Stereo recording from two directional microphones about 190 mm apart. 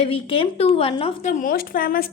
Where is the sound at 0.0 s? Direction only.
30° left (ahead or behind).